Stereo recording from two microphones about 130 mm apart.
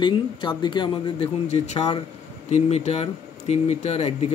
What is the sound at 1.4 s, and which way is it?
Speech, 55° left (ahead or behind).